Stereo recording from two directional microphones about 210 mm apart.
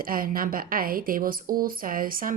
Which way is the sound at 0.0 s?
45° right (ahead or behind).